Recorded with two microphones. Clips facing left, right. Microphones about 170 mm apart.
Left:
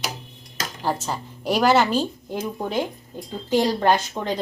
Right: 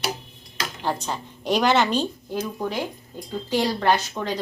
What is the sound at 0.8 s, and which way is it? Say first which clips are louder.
Speech: left 2 dB; 5° left (ahead or behind).